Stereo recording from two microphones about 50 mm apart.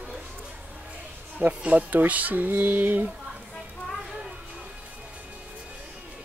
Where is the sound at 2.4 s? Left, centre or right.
Right.